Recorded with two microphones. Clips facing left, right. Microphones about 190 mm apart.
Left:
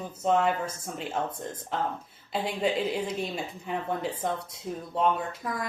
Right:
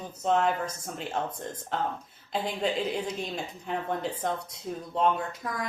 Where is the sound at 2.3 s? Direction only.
5° left (ahead or behind).